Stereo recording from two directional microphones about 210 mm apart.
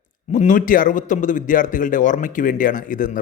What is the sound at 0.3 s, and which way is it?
A man's voice, 35° left (ahead or behind).